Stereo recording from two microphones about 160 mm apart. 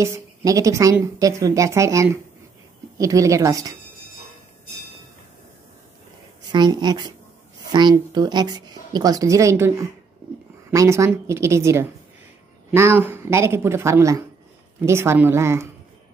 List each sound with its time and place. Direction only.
0.0 s a woman's voice: 20° right (ahead or behind)
6.5 s a woman's voice: 25° right (ahead or behind)